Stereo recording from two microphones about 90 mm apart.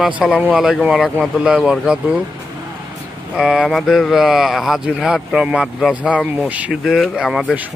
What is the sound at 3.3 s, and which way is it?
Speech, 10° right (ahead or behind).